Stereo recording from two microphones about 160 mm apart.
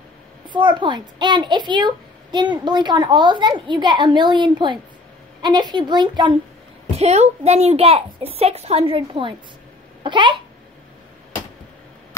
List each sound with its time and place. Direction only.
0.5 s a child's voice: 30° right (ahead or behind)
7.0 s a woman's voice: 40° right (ahead or behind)